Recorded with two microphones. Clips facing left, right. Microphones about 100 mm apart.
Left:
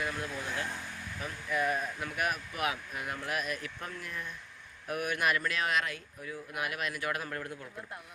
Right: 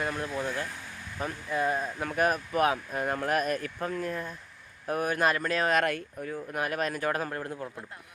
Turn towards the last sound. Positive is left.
turn(degrees=-35)  # may be behind; listen again after turning